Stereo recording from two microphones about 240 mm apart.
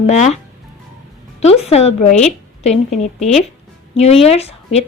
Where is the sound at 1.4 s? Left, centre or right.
Left.